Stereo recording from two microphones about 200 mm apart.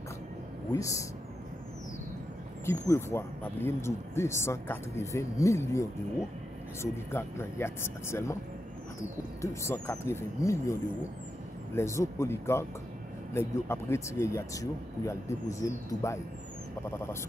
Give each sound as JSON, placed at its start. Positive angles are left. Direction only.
{"t": 0.7, "sound": "speech", "side_deg": 15}
{"t": 2.9, "sound": "speech", "side_deg": 10}
{"t": 9.4, "sound": "speech", "side_deg": 15}